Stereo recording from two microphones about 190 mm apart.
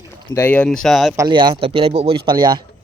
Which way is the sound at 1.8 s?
60° right (ahead or behind).